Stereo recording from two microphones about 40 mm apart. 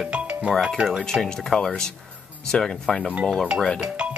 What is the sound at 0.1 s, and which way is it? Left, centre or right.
Music, right.